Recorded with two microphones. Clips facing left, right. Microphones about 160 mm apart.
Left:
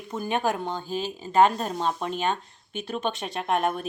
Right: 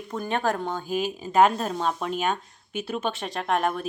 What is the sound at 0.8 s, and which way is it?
Speech, 10° right (ahead or behind).